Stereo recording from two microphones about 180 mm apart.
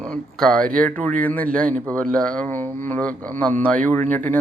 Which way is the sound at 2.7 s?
10° left (ahead or behind).